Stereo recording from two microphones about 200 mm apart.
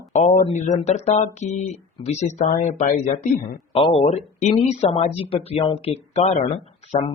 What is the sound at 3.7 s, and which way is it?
Speech, 25° left (ahead or behind).